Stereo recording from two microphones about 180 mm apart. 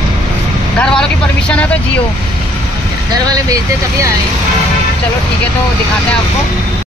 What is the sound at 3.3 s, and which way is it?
Speech, 20° right (ahead or behind).